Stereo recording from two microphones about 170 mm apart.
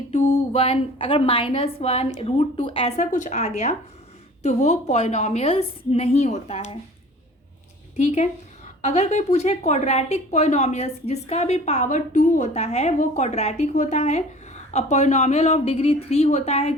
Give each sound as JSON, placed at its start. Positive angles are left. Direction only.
{"t": 0.2, "sound": "a sound", "side_deg": 55}
{"t": 0.5, "sound": "a woman's voice", "side_deg": 35}
{"t": 7.9, "sound": "a woman's voice", "side_deg": 40}